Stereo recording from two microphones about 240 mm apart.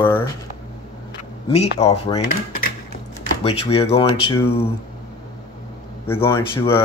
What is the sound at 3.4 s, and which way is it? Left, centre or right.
Speech, left.